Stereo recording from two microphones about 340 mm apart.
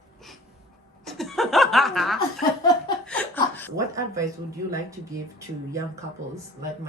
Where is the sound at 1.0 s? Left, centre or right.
Centre.